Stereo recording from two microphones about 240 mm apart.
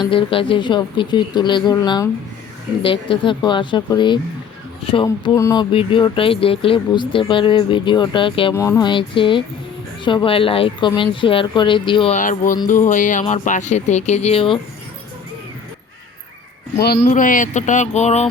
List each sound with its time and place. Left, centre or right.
0.0 s speech: left
16.7 s speech: left